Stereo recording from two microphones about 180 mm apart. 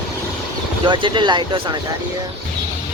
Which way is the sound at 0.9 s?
25° right (ahead or behind).